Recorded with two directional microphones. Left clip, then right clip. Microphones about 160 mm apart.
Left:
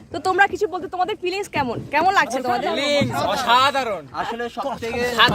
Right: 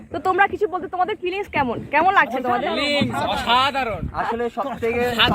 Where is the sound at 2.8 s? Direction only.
45° left (ahead or behind).